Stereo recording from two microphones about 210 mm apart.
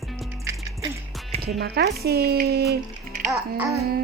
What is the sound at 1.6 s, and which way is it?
Music, 50° right (ahead or behind).